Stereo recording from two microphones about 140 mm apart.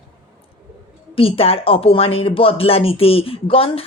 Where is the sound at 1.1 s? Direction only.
40° left (ahead or behind).